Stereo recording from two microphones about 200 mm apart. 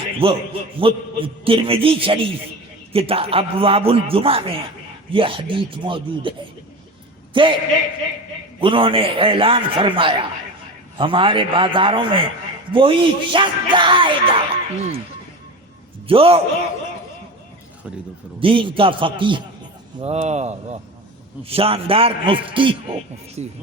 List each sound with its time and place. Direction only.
0.2 s speech: 25° right (ahead or behind)
7.3 s speech: 25° right (ahead or behind)
8.6 s speech: 25° right (ahead or behind)
16.0 s speech: 30° right (ahead or behind)
18.3 s speech: 25° right (ahead or behind)